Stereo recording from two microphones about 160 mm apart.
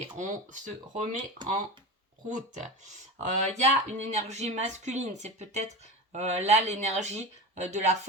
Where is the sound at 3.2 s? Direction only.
45° right (ahead or behind).